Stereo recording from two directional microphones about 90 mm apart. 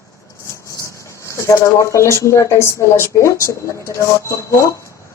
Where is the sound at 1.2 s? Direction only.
35° left (ahead or behind).